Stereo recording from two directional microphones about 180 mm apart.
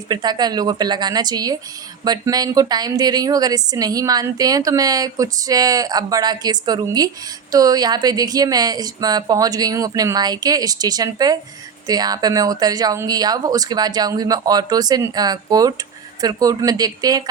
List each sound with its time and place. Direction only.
0.1 s a woman's voice: 20° right (ahead or behind)